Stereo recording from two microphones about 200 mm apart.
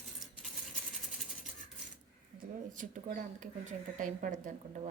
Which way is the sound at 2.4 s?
40° right (ahead or behind).